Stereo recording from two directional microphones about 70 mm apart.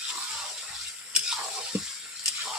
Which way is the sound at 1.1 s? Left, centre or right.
Centre.